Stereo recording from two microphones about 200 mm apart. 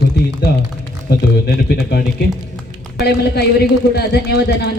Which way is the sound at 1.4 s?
55° left (ahead or behind).